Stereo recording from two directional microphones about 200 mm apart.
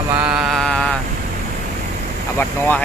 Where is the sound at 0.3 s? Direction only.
5° right (ahead or behind).